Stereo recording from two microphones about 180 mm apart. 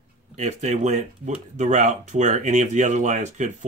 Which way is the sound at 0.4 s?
40° right (ahead or behind).